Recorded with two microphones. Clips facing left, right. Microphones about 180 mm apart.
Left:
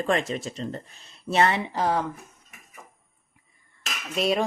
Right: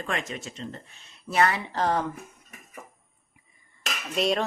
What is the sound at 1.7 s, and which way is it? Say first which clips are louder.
Dishes: left 1 dB; 5° left (ahead or behind).